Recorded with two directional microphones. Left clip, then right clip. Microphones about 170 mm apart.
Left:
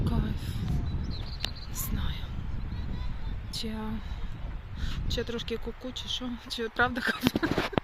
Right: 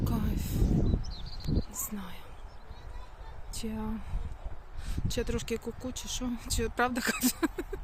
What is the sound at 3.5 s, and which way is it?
Speech, 5° right (ahead or behind).